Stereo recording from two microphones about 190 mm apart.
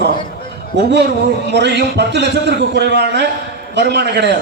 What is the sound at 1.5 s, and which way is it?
A man's voice, 65° right (ahead or behind).